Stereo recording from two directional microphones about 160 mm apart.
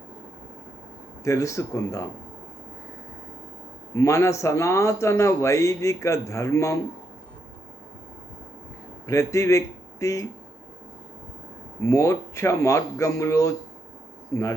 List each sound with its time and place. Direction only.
1.2 s speech: 20° left (ahead or behind)
3.9 s speech: 20° left (ahead or behind)
9.0 s speech: 20° left (ahead or behind)
11.8 s speech: 20° left (ahead or behind)